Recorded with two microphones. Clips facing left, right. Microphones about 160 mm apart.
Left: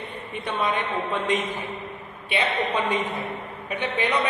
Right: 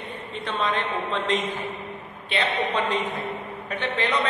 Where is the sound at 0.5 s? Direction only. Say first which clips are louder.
Even; 10° left (ahead or behind).